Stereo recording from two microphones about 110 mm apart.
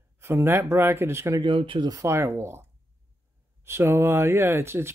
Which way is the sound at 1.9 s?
25° right (ahead or behind).